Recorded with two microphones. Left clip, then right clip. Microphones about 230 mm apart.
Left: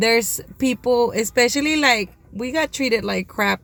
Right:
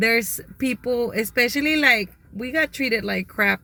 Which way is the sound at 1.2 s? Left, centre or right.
Centre.